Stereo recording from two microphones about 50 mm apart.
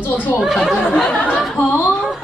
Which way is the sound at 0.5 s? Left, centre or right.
Centre.